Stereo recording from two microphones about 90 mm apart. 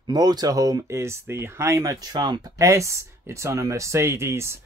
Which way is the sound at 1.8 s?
45° right (ahead or behind).